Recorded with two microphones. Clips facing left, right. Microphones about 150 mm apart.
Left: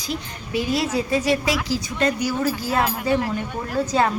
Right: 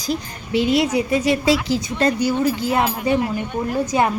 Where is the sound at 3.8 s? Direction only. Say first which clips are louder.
Even; 15° right (ahead or behind).